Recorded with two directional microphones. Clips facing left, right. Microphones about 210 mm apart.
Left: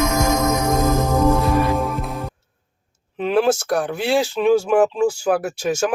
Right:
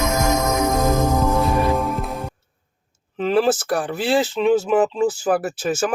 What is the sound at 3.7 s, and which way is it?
Speech, 5° right (ahead or behind).